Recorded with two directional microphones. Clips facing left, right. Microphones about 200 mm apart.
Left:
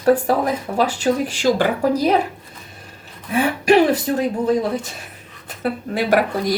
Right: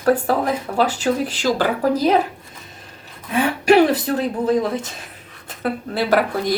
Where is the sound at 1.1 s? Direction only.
30° left (ahead or behind).